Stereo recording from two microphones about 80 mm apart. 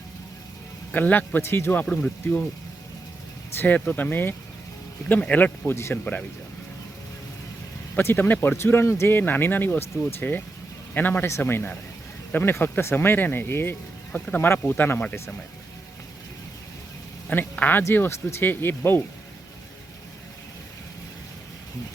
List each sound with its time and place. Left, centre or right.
0.9 s speech: left
1.8 s speech: centre
3.5 s speech: left
5.7 s speech: left
7.9 s speech: left
17.2 s speech: centre